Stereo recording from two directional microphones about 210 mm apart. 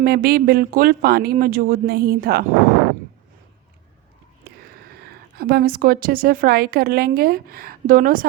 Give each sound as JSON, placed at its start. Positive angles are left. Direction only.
{"t": 0.0, "sound": "a woman's voice", "side_deg": -45}
{"t": 5.4, "sound": "a woman's voice", "side_deg": -45}